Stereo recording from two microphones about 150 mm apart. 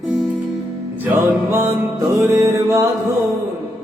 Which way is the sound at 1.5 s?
15° right (ahead or behind).